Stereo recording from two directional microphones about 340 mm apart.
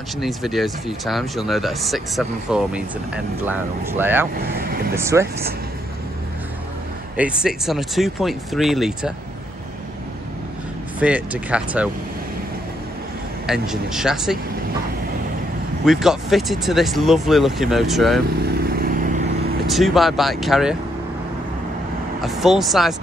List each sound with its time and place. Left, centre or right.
0.2 s speech: centre
4.4 s speech: right
4.9 s speech: centre
7.2 s speech: centre
11.0 s speech: centre
13.5 s speech: centre
15.8 s speech: centre
18.4 s vehicle: right
19.7 s speech: centre
22.2 s speech: centre